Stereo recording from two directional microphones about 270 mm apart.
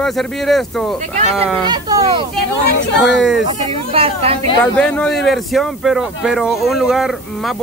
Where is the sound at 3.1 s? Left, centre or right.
Centre.